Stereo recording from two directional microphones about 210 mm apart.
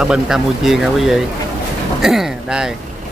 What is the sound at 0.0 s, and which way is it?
Speech, centre (ahead or behind).